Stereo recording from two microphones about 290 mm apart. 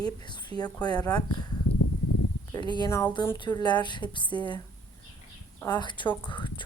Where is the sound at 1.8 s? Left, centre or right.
Left.